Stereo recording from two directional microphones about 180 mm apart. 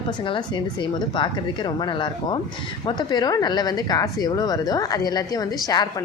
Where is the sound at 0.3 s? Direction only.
25° left (ahead or behind).